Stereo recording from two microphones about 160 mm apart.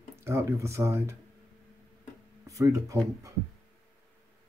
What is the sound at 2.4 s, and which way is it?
Speech, 20° right (ahead or behind).